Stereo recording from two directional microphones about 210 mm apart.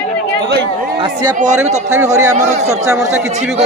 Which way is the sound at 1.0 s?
20° right (ahead or behind).